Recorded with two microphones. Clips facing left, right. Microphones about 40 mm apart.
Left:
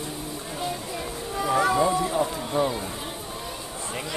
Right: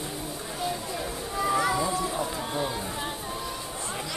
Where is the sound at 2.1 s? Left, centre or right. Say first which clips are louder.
Left 4 dB; centre.